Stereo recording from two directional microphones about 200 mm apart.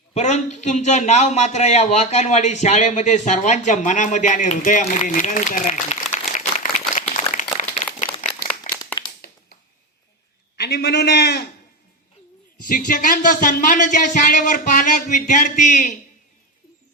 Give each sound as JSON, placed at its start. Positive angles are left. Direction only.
{"t": 0.1, "sound": "a man's voice", "side_deg": 35}
{"t": 8.2, "sound": "a sound", "side_deg": 40}
{"t": 8.7, "sound": "crumpling", "side_deg": 40}
{"t": 9.2, "sound": "finger snapping", "side_deg": 50}
{"t": 10.6, "sound": "a man's voice", "side_deg": 55}
{"t": 12.6, "sound": "speech", "side_deg": 45}